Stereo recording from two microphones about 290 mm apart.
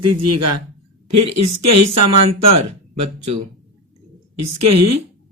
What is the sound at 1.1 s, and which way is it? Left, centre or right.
Speech, right.